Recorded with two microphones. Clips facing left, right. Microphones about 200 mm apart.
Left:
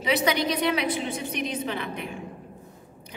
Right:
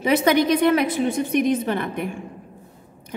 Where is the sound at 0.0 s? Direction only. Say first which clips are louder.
Right 7 dB; 50° right (ahead or behind).